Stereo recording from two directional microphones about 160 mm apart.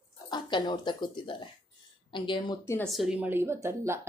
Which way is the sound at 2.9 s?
5° right (ahead or behind).